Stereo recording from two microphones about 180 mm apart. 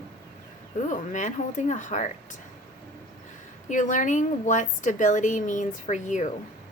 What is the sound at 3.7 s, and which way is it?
A woman's voice, 45° left (ahead or behind).